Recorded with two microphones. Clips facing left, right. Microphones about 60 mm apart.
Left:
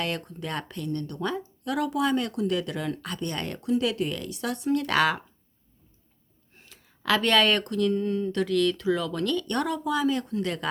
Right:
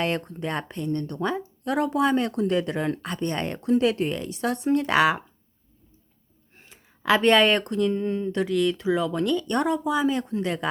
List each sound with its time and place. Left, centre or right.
0.0 s speech: right
6.6 s speech: right